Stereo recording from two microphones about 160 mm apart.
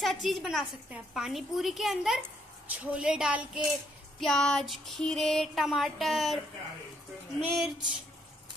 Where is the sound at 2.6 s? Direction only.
5° right (ahead or behind).